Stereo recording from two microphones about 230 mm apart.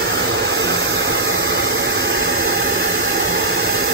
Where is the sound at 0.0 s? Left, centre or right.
Right.